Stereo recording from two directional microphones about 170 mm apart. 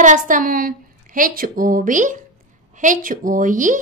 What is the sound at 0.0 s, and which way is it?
A woman's voice, 50° right (ahead or behind).